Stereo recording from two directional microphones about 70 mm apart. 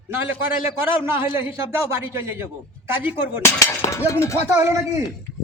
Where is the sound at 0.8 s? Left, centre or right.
Right.